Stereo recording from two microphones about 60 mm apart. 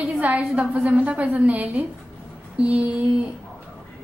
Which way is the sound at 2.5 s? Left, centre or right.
Right.